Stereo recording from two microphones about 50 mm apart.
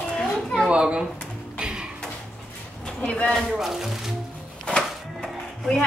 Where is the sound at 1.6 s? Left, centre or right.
Centre.